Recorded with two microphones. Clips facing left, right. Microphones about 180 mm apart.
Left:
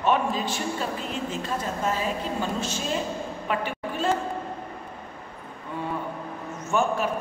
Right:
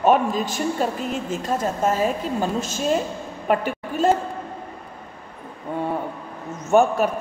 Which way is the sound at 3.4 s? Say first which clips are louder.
Right 8 dB; 45° right (ahead or behind).